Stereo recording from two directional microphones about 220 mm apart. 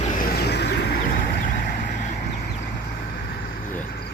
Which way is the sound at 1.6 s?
45° left (ahead or behind).